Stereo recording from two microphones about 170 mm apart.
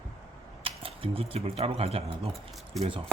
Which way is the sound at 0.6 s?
35° right (ahead or behind).